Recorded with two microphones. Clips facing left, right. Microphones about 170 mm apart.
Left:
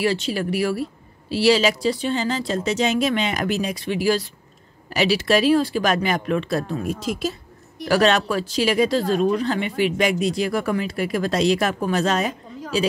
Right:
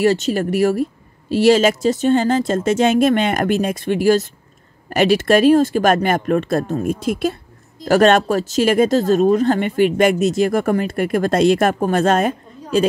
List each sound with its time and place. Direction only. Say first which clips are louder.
0.0 s speech: right 6 dB; 45° right (ahead or behind)